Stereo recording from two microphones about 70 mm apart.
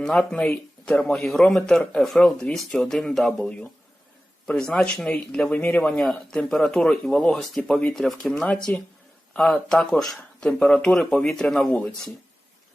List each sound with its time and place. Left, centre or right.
0.0 s speech: centre
6.0 s speech: centre